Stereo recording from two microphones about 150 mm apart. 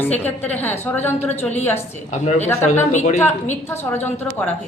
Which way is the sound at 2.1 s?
50° left (ahead or behind).